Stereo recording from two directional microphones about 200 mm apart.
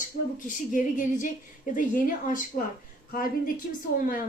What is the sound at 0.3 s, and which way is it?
A woman's voice, 40° left (ahead or behind).